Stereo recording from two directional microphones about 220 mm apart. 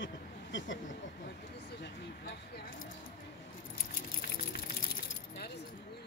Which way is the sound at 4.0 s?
40° left (ahead or behind).